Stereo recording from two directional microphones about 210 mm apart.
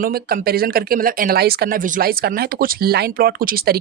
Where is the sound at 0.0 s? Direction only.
45° right (ahead or behind).